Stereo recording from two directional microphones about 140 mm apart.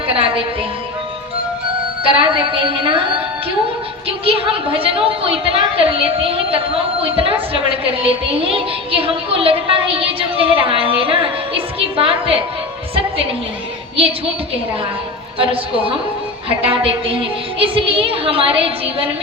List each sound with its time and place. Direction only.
0.1 s a woman's voice: 40° right (ahead or behind)
2.0 s a woman's voice: 40° right (ahead or behind)
4.3 s a woman's voice: 40° right (ahead or behind)
15.5 s a woman's voice: 40° right (ahead or behind)